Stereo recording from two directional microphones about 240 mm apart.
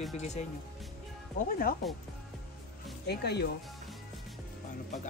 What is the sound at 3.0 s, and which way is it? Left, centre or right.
Speech, left.